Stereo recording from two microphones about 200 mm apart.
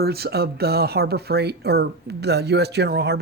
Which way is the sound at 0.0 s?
50° right (ahead or behind).